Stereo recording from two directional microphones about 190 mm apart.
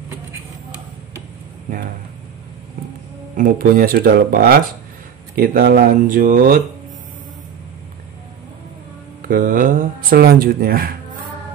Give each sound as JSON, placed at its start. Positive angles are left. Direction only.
{"t": 3.3, "sound": "speech", "side_deg": -45}
{"t": 9.2, "sound": "speech", "side_deg": -45}